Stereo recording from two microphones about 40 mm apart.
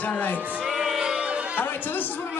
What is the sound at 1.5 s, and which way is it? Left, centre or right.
Speech, left.